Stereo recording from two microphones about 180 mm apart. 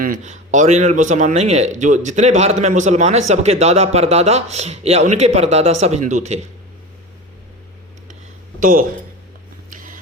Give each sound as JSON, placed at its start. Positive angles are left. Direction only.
{"t": 0.0, "sound": "speech", "side_deg": -45}
{"t": 8.6, "sound": "speech", "side_deg": -50}
{"t": 9.6, "sound": "a sound", "side_deg": -45}